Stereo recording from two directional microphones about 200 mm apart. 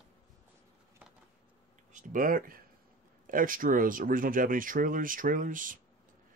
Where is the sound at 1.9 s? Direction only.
40° right (ahead or behind).